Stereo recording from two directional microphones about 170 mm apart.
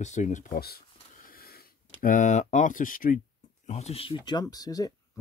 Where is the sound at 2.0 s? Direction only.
50° left (ahead or behind).